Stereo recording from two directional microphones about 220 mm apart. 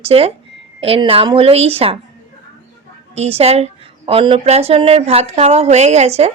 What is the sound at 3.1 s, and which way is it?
Speech, 25° right (ahead or behind).